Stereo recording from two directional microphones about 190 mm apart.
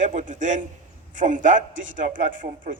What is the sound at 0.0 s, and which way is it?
A man's voice, 40° right (ahead or behind).